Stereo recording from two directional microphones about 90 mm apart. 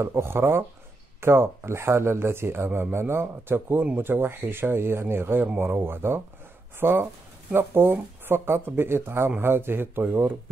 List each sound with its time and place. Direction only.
0.0 s a man's voice: 30° right (ahead or behind)